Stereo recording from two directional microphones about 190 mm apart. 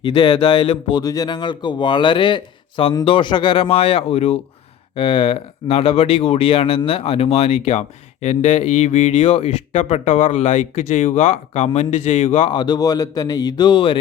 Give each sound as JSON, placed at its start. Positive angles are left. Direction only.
{"t": 0.0, "sound": "speech", "side_deg": 25}